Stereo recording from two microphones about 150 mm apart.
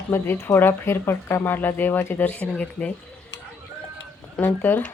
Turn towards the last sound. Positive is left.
turn(degrees=10)  # may be behind; listen again after turning